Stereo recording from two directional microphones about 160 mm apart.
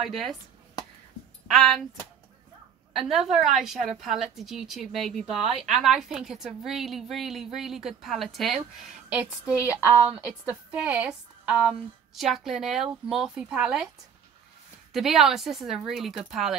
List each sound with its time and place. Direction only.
0.0 s a woman's voice: centre (ahead or behind)
1.5 s a woman's voice: centre (ahead or behind)
3.1 s a woman's voice: centre (ahead or behind)
9.6 s speech: 20° left (ahead or behind)
10.5 s a woman's voice: 10° right (ahead or behind)
14.9 s a woman's voice: centre (ahead or behind)